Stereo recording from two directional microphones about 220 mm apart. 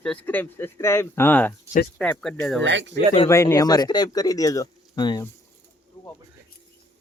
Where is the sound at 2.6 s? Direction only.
55° right (ahead or behind).